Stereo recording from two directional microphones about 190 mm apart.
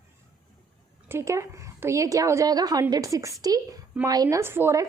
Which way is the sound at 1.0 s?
15° right (ahead or behind).